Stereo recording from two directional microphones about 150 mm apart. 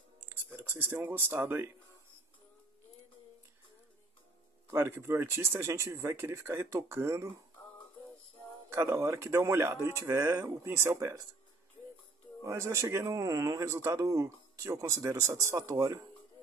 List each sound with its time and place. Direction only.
0.2 s speech: 15° right (ahead or behind)
4.6 s speech: 15° right (ahead or behind)
8.6 s speech: 15° right (ahead or behind)
12.4 s speech: 20° right (ahead or behind)